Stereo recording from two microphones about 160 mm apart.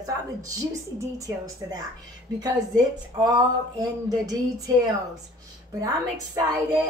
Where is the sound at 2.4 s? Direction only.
25° right (ahead or behind).